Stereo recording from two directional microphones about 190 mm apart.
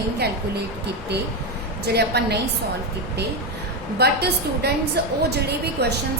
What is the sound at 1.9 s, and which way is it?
Speech, 60° right (ahead or behind).